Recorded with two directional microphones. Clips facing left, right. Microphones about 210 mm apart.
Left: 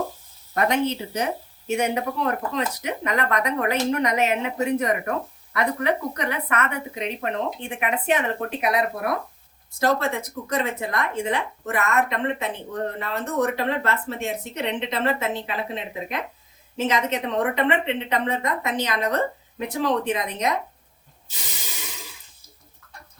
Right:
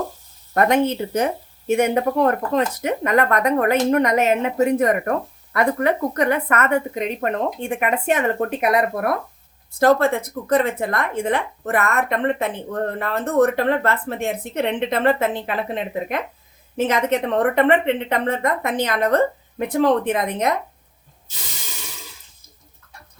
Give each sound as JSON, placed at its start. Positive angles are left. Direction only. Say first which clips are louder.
{"t": 0.5, "sound": "a woman's voice", "louder": "right 5 dB", "side_deg": -50}